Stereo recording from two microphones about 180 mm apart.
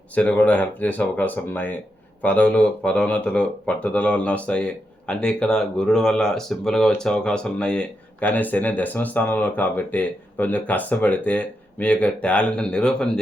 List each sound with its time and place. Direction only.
0.1 s speech: 10° left (ahead or behind)